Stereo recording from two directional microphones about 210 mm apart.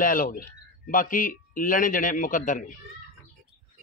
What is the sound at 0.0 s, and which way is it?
A man's voice, 40° left (ahead or behind).